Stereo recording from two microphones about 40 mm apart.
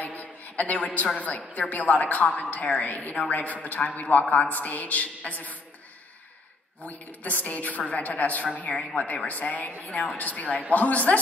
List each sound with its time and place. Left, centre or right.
0.0 s a woman's voice: left
6.8 s a woman's voice: left